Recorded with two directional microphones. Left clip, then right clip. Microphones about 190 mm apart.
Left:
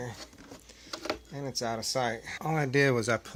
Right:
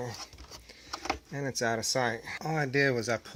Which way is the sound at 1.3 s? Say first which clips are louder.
Right 5 dB; 35° right (ahead or behind).